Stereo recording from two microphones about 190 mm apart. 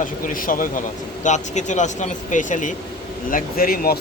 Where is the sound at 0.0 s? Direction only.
45° left (ahead or behind).